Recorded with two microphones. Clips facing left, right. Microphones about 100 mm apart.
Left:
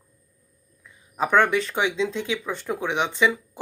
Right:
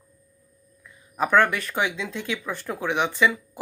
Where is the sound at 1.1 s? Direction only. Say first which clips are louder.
Even; 20° left (ahead or behind).